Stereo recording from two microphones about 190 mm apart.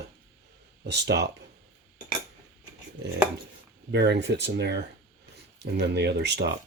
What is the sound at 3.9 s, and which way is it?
Speech, 65° right (ahead or behind).